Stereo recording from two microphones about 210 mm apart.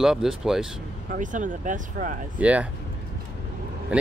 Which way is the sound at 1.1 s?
35° right (ahead or behind).